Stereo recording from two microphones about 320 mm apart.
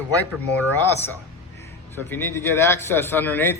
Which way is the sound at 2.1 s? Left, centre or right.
Centre.